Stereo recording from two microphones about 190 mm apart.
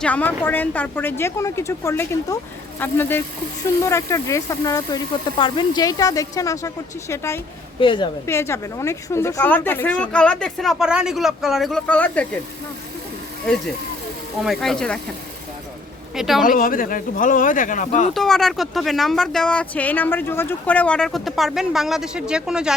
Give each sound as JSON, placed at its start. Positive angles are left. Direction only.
{"t": 0.0, "sound": "speech", "side_deg": 10}
{"t": 7.8, "sound": "speech", "side_deg": 25}
{"t": 8.3, "sound": "speech", "side_deg": 15}
{"t": 14.4, "sound": "speech", "side_deg": 0}
{"t": 16.1, "sound": "speech", "side_deg": 0}
{"t": 16.4, "sound": "speech", "side_deg": 45}
{"t": 18.1, "sound": "speech", "side_deg": 0}